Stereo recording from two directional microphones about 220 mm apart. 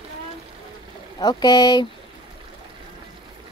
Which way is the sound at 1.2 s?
20° left (ahead or behind).